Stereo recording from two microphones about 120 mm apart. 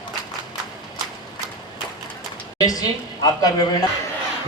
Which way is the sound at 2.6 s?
30° left (ahead or behind).